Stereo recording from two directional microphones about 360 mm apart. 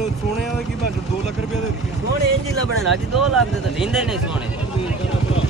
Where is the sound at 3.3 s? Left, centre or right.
Centre.